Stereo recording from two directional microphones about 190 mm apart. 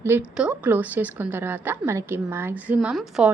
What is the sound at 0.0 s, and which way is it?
A woman's voice, 10° right (ahead or behind).